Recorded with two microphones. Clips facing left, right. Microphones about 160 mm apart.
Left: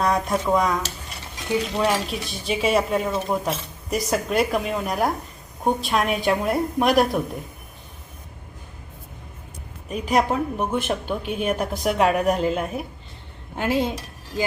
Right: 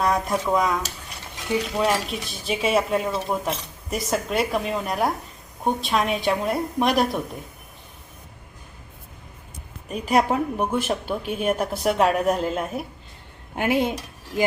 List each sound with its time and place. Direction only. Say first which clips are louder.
0.0 s a woman's voice: left 1 dB; centre (ahead or behind)
10.1 s a woman's voice: right 1 dB; 10° right (ahead or behind)
13.6 s a woman's voice: right 1 dB; 15° right (ahead or behind)